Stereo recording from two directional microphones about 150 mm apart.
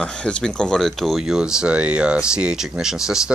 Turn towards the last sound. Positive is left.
turn(degrees=-5)  # may be behind; listen again after turning